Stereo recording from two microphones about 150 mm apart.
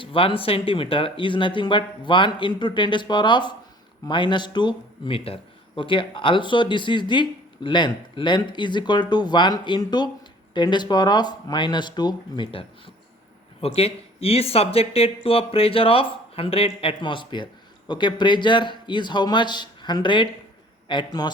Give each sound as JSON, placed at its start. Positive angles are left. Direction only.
{"t": 0.0, "sound": "a man's voice", "side_deg": 35}